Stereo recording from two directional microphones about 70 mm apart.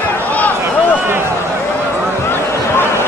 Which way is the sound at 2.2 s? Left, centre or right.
Left.